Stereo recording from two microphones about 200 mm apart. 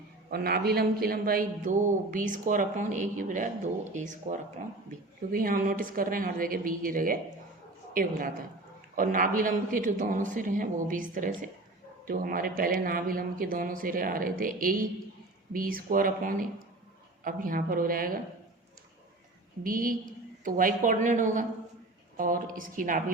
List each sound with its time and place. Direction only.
0.3 s a man's voice: 50° right (ahead or behind)
19.6 s speech: 45° right (ahead or behind)